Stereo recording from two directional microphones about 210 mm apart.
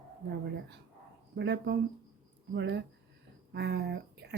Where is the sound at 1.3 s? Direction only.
55° right (ahead or behind).